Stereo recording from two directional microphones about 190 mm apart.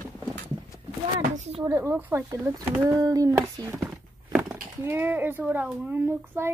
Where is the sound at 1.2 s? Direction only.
40° right (ahead or behind).